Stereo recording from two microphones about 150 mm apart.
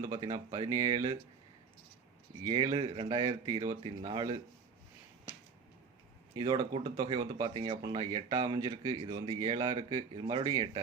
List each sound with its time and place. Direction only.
0.0 s speech: 25° right (ahead or behind)
2.4 s speech: 30° right (ahead or behind)
6.3 s speech: 25° right (ahead or behind)